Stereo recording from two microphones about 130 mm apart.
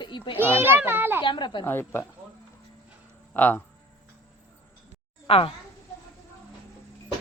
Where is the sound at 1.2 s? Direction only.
35° left (ahead or behind).